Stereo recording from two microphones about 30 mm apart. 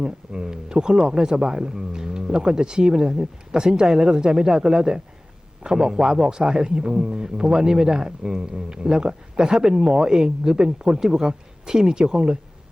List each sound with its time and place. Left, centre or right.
0.0 s a man's voice: right